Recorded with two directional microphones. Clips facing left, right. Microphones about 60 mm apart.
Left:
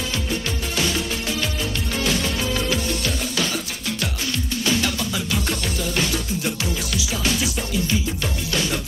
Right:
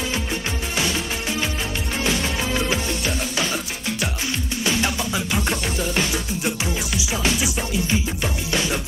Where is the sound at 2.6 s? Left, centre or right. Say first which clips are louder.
Even; right.